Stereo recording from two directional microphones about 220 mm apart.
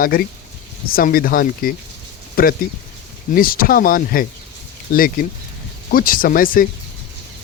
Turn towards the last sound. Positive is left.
turn(degrees=40)  # may be behind; listen again after turning